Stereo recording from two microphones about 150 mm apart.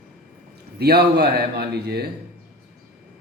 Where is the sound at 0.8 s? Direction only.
90° right.